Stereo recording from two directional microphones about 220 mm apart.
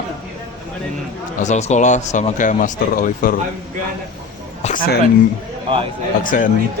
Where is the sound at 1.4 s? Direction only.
30° left (ahead or behind).